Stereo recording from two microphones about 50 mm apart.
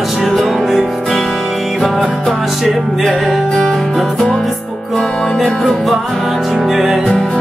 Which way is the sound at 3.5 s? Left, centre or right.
Centre.